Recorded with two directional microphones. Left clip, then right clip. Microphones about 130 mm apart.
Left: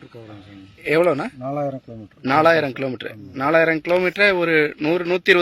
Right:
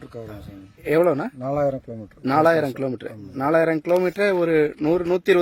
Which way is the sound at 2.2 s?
10° right (ahead or behind).